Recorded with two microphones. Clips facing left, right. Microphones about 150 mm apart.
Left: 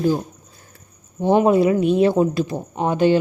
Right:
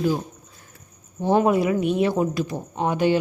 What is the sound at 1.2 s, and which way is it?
Speech, 25° left (ahead or behind).